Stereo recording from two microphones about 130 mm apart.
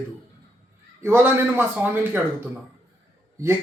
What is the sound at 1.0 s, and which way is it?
Speech, 15° right (ahead or behind).